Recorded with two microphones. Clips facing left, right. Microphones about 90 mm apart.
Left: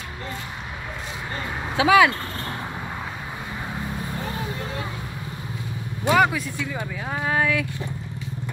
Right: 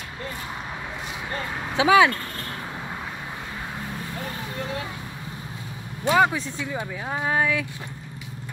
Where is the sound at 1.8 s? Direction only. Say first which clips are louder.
Left 1 dB; 25° right (ahead or behind).